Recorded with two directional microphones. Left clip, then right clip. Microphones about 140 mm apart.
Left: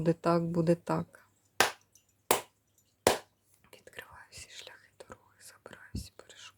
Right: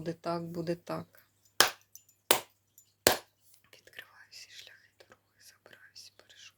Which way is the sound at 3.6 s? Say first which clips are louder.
Left 2 dB; 40° left (ahead or behind).